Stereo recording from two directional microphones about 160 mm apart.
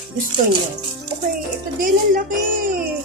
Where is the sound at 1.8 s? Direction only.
60° right (ahead or behind).